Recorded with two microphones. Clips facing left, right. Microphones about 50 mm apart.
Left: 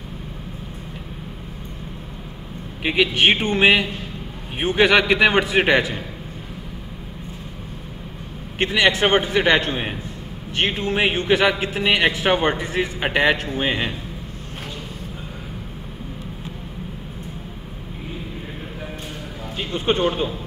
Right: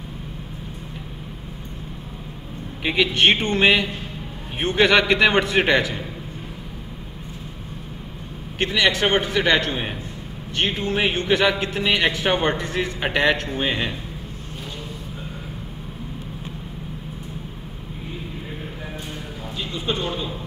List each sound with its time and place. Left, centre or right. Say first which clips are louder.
2.8 s a man's voice: left 1 dB; centre
8.5 s a man's voice: left 2 dB; centre
19.6 s speech: left 6 dB; left